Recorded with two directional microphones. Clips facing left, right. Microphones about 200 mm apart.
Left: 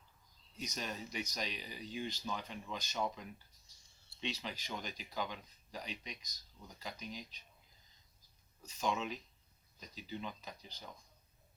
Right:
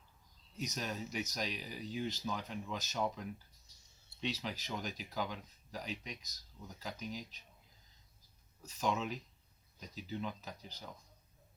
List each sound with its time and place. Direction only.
0.5 s speech: 5° right (ahead or behind)
8.6 s speech: 5° right (ahead or behind)